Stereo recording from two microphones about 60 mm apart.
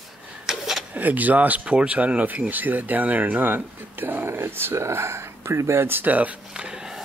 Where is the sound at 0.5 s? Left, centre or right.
Centre.